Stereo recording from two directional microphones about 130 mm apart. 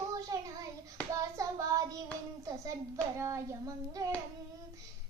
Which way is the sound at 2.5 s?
25° right (ahead or behind).